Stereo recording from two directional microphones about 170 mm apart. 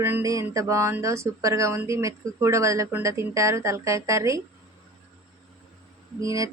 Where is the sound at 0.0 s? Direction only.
15° right (ahead or behind).